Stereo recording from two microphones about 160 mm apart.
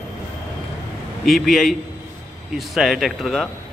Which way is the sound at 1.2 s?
Centre (ahead or behind).